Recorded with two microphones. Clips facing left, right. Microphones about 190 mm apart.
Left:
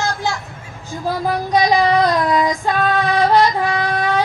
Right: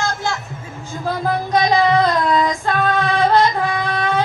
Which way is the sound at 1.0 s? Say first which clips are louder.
Left 1 dB; 15° left (ahead or behind).